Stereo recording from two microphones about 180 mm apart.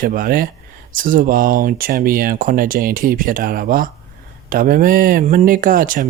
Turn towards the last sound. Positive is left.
turn(degrees=-50)  # may be behind; listen again after turning